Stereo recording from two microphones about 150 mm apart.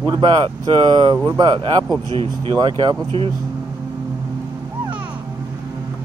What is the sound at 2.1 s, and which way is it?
Speech, 35° right (ahead or behind).